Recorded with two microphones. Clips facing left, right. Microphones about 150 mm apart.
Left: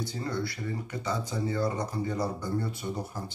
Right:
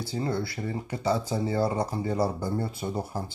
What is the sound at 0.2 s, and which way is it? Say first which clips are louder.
Speech: right 5 dB; 30° right (ahead or behind).